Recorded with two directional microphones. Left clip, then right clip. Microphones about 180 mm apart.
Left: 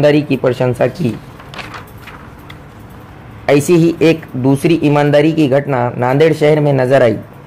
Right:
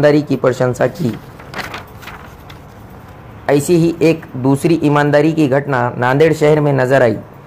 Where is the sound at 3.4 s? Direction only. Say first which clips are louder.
Left 2 dB; 20° left (ahead or behind).